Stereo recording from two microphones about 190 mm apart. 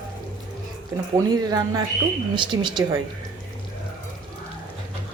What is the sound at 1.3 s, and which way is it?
A woman's voice, 20° right (ahead or behind).